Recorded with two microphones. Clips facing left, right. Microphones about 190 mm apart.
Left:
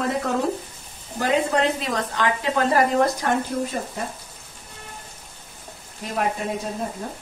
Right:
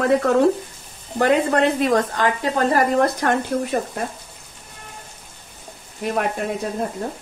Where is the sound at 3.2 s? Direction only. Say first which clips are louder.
Right 3 dB; 65° right (ahead or behind).